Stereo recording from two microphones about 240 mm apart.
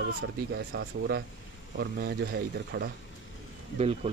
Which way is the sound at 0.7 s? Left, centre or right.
Right.